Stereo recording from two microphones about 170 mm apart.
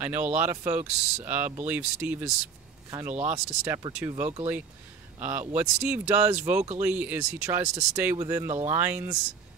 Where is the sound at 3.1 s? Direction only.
40° right (ahead or behind).